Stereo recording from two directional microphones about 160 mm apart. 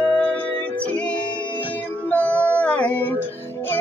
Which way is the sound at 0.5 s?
30° left (ahead or behind).